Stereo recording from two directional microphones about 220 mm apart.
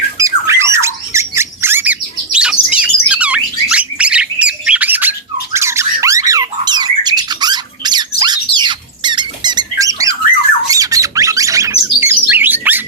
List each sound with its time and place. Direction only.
0.2 s squeak: 15° right (ahead or behind)
5.5 s squawk: 10° right (ahead or behind)